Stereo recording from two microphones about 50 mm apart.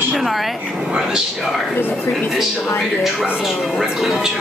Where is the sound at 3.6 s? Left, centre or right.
Centre.